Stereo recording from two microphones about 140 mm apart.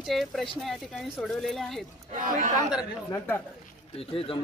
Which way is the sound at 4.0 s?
40° left (ahead or behind).